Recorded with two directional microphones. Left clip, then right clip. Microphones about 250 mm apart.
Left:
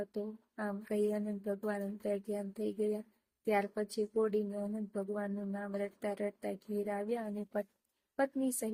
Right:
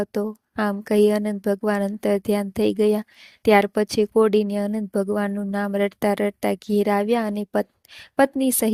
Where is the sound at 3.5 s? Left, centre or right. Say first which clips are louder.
Right 16 dB; right.